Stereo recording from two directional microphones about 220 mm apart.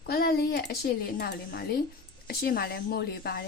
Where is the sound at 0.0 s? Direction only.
45° left (ahead or behind).